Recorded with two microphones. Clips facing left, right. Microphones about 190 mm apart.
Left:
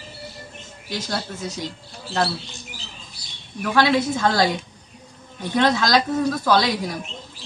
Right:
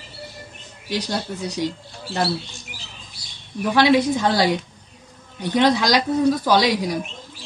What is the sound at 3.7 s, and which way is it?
Speech, 15° right (ahead or behind).